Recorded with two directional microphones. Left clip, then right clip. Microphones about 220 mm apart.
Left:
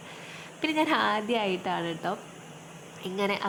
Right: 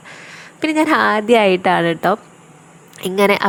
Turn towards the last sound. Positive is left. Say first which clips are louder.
# right 15 dB
turn(degrees=-45)  # may be behind; listen again after turning